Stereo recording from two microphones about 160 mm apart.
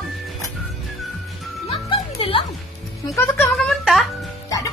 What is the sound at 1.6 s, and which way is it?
Music, 35° left (ahead or behind).